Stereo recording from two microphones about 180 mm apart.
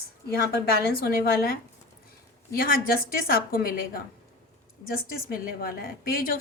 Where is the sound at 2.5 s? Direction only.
55° left (ahead or behind).